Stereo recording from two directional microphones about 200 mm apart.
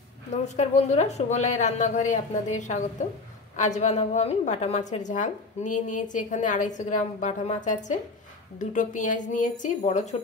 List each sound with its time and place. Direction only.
0.3 s a woman's voice: 35° left (ahead or behind)